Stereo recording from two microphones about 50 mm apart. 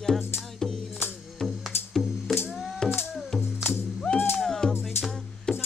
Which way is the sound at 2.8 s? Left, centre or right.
Centre.